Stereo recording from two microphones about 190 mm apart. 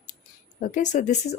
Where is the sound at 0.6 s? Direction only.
40° left (ahead or behind).